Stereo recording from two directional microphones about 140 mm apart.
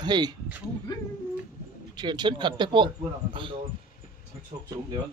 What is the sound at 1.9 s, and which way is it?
Speech, 30° right (ahead or behind).